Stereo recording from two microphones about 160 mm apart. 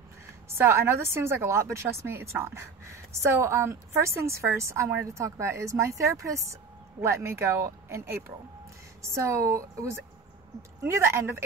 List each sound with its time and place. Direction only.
0.5 s a woman's voice: 15° right (ahead or behind)